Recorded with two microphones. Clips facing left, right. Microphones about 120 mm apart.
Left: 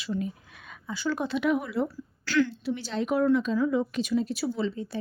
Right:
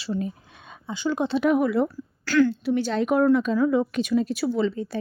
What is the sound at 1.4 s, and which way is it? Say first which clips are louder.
Speech: right 7 dB; 50° right (ahead or behind).